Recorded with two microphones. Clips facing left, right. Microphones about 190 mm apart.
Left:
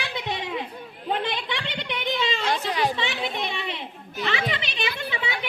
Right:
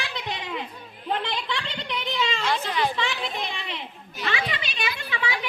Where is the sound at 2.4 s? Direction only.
35° left (ahead or behind).